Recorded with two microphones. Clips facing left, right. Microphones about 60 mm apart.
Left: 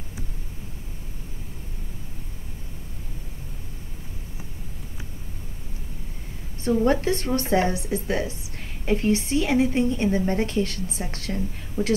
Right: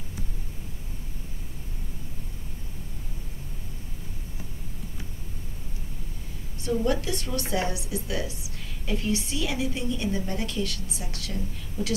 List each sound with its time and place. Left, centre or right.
6.6 s a woman's voice: left